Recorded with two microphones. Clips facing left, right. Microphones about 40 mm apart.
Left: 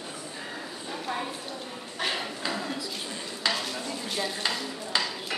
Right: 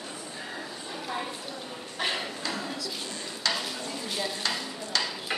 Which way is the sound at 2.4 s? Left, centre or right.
Centre.